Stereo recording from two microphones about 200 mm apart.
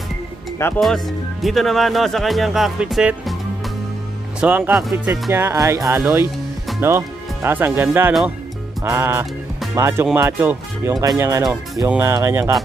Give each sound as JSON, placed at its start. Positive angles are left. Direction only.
{"t": 0.7, "sound": "speech", "side_deg": 0}
{"t": 4.4, "sound": "speech", "side_deg": -5}